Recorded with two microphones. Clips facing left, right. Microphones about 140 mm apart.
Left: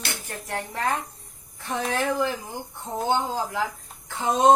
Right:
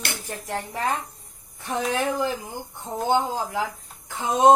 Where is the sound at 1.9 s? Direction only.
15° right (ahead or behind).